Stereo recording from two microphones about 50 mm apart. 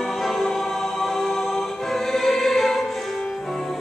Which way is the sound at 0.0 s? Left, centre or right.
Centre.